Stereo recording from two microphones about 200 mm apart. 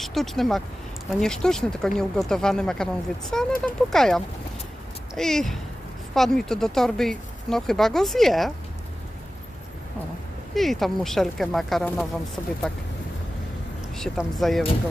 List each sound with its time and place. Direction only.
0.0 s speech: centre (ahead or behind)
10.5 s speech: centre (ahead or behind)
13.9 s speech: centre (ahead or behind)